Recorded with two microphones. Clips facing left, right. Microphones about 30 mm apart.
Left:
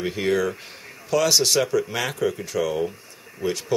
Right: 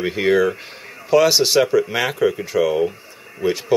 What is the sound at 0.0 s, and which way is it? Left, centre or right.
Speech, centre.